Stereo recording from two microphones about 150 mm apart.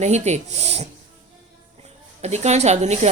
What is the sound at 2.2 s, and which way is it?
Speech, 50° right (ahead or behind).